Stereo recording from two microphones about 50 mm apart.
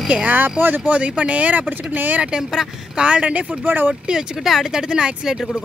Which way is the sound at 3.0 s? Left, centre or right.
Right.